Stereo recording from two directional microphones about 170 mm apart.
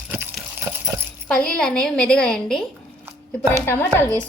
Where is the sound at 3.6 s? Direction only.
10° left (ahead or behind).